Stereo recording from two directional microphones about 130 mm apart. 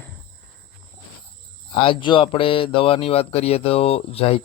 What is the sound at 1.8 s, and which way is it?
Speech, 40° left (ahead or behind).